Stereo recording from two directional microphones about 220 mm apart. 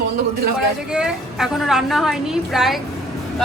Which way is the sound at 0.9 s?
5° right (ahead or behind).